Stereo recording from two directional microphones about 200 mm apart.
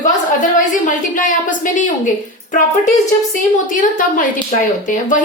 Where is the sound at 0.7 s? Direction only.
40° left (ahead or behind).